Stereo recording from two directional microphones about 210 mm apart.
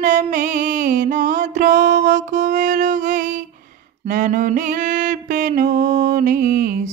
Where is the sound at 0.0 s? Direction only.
40° right (ahead or behind).